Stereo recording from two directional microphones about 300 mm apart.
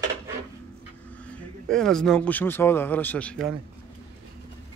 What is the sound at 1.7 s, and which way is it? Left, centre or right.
Speech, centre.